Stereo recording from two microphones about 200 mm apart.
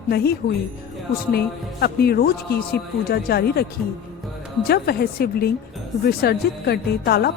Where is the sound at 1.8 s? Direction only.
50° left (ahead or behind).